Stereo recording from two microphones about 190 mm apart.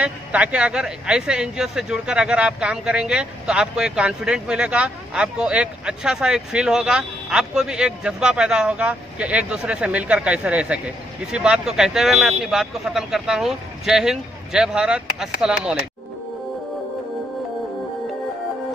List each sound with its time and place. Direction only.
0.0 s speech: 5° right (ahead or behind)